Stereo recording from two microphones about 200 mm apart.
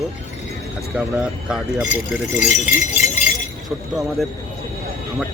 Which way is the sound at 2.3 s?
35° left (ahead or behind).